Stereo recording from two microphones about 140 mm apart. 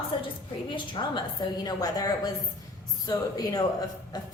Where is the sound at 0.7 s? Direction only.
35° left (ahead or behind).